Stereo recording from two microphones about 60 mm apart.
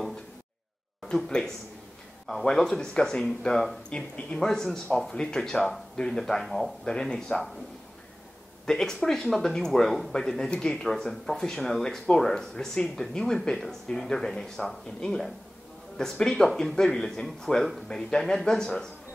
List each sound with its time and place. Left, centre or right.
1.1 s speech: centre
8.6 s speech: centre